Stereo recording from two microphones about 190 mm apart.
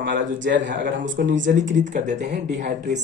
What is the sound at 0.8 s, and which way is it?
Speech, 45° right (ahead or behind).